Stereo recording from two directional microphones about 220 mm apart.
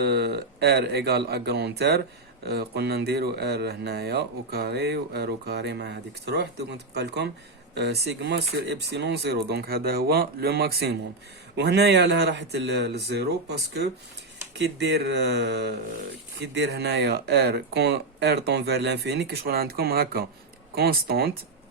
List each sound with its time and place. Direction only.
0.0 s speech: 50° right (ahead or behind)